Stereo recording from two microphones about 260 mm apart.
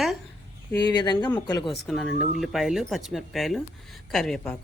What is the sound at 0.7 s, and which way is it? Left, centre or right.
Speech, centre.